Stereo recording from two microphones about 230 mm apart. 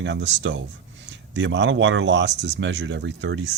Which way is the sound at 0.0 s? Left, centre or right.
Right.